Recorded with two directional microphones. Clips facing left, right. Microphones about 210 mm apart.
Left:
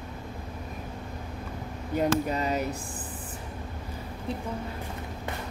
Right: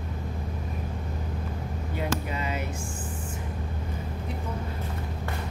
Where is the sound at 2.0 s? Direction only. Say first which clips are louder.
Left 6 dB; 40° left (ahead or behind).